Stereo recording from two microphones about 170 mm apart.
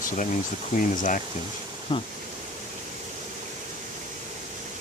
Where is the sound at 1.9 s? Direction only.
30° left (ahead or behind).